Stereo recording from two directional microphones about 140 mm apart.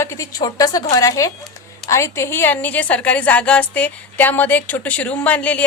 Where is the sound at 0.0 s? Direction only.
20° left (ahead or behind).